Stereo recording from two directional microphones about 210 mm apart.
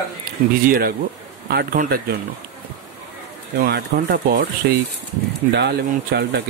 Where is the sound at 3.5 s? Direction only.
50° right (ahead or behind).